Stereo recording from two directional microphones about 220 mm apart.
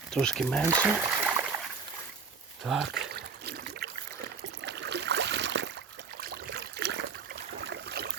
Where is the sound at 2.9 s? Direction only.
50° right (ahead or behind).